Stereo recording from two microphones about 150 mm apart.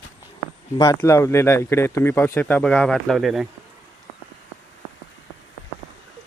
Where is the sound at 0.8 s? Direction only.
20° left (ahead or behind); by 3.5 s centre (ahead or behind).